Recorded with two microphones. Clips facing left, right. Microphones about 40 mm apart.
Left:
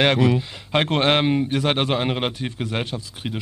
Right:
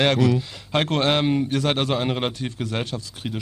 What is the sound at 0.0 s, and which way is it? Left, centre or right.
Speech, left.